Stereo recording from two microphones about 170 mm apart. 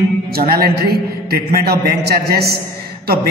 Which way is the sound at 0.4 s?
65° right (ahead or behind).